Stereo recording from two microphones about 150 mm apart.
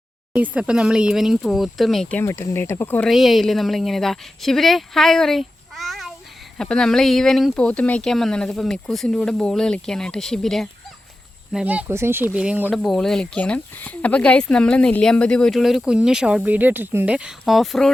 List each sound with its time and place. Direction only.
0.3 s speech: 10° right (ahead or behind)
2.2 s speech: 20° left (ahead or behind)
3.1 s speech: centre (ahead or behind)
11.5 s speech: 10° right (ahead or behind)